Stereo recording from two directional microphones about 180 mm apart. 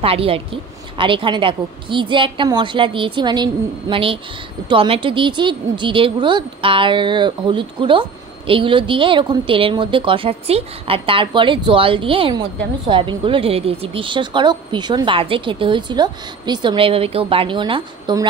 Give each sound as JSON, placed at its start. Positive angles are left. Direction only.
{"t": 0.0, "sound": "speech", "side_deg": -30}